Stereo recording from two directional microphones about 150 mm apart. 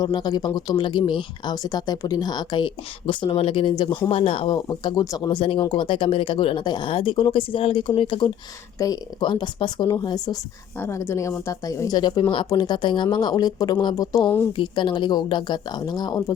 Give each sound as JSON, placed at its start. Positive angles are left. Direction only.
{"t": 0.0, "sound": "speech", "side_deg": 25}
{"t": 4.5, "sound": "speech", "side_deg": 30}
{"t": 10.8, "sound": "speech", "side_deg": 15}
{"t": 14.5, "sound": "speech", "side_deg": 30}